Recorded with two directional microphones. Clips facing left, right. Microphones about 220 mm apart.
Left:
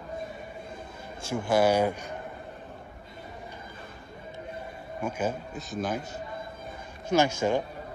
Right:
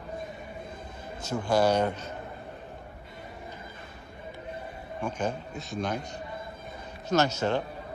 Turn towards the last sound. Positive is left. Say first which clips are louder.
# left 1 dB
turn(degrees=10)  # may be behind; listen again after turning